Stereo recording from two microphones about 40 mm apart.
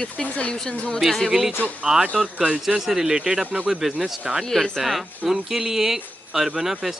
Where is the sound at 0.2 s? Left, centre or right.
Left.